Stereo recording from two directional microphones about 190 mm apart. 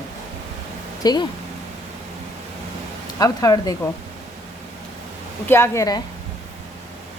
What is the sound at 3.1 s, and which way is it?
Speech, 20° left (ahead or behind).